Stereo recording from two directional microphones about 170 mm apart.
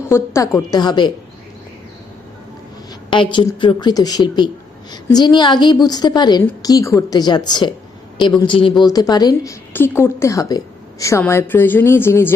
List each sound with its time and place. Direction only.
0.1 s speech: 15° left (ahead or behind)
3.1 s a woman's voice: 30° left (ahead or behind); by 12.3 s 15° left (ahead or behind)